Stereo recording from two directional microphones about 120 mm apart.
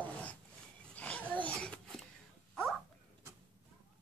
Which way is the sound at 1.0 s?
10° left (ahead or behind).